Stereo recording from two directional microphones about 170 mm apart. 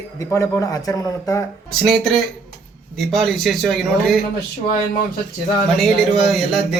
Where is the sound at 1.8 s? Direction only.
Centre (ahead or behind).